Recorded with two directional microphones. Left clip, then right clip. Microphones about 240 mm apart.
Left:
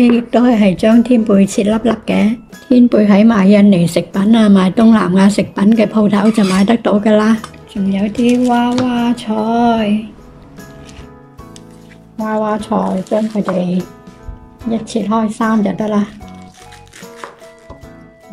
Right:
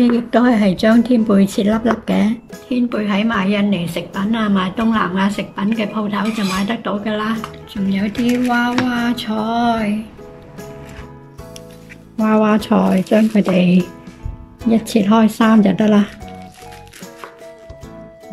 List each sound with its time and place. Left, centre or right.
0.0 s speech: centre
2.7 s a woman's voice: left
7.9 s a sound: centre
12.3 s speech: centre